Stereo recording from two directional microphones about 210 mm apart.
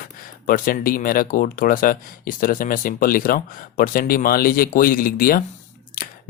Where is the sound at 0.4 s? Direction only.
40° left (ahead or behind).